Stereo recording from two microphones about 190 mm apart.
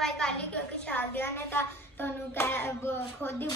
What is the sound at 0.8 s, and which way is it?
Hands, 10° left (ahead or behind).